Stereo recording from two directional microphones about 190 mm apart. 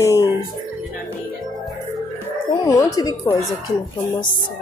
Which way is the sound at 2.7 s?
15° left (ahead or behind).